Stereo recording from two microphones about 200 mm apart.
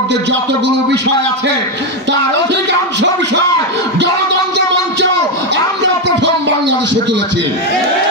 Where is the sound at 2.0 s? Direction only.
60° right (ahead or behind).